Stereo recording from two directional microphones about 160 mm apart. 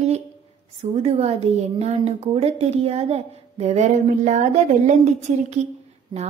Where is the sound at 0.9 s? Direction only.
40° right (ahead or behind).